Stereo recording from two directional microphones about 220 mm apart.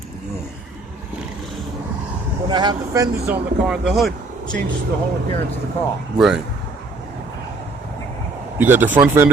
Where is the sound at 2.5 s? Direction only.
20° right (ahead or behind); by 4.1 s centre (ahead or behind).